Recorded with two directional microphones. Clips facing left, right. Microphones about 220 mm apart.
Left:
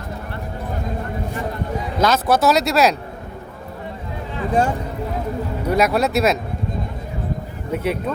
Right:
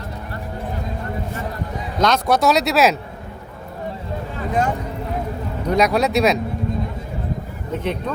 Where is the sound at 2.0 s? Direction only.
5° left (ahead or behind).